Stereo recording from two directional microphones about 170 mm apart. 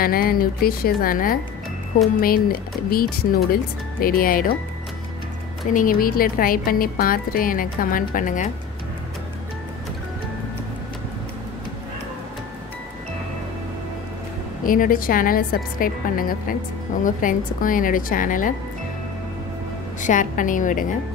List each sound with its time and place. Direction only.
0.0 s speech: 60° left (ahead or behind)
5.7 s speech: 55° left (ahead or behind)
14.6 s a woman's voice: 55° left (ahead or behind)
20.0 s a woman's voice: 50° left (ahead or behind)